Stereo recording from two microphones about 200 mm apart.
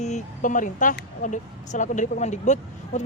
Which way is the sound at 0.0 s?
40° left (ahead or behind).